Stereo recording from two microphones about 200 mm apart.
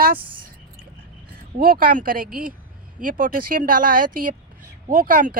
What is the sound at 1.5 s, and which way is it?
Speech, 45° right (ahead or behind).